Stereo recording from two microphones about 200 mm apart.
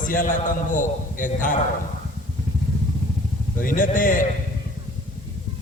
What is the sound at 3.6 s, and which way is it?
Speech, 40° left (ahead or behind).